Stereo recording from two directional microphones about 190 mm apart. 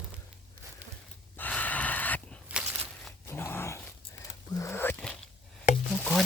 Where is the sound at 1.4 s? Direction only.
10° left (ahead or behind).